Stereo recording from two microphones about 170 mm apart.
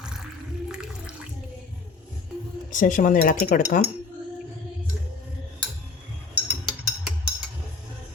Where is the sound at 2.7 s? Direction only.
50° left (ahead or behind).